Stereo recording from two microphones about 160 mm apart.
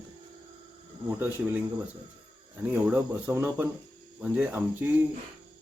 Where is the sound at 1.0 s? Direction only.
15° right (ahead or behind).